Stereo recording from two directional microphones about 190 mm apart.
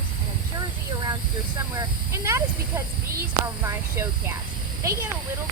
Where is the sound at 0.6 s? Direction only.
20° right (ahead or behind).